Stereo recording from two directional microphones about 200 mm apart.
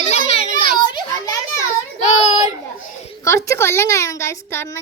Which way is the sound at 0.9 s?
20° left (ahead or behind).